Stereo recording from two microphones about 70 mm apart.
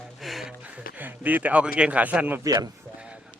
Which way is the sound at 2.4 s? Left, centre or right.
Right.